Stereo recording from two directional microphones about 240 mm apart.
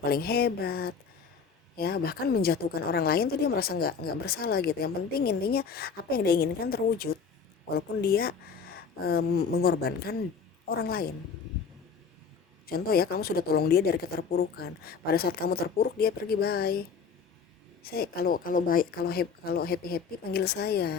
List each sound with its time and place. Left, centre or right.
0.0 s a woman's voice: left
12.6 s a woman's voice: left
17.8 s a woman's voice: left